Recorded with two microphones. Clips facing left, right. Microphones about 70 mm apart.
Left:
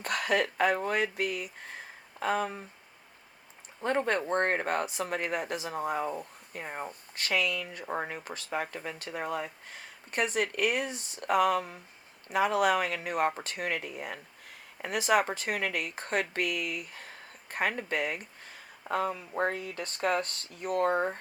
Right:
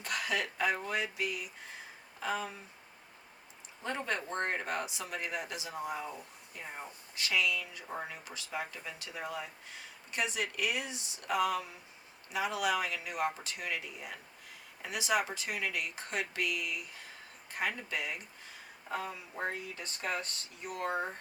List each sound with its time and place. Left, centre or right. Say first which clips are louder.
0.0 s speech: left 6 dB; left
3.8 s speech: left 8 dB; left